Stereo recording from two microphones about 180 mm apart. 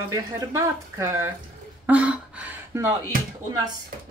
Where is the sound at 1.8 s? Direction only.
5° right (ahead or behind).